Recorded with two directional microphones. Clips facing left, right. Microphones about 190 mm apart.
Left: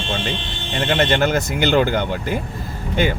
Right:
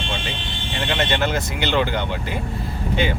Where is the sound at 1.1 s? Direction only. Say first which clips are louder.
Left 4 dB; 45° left (ahead or behind).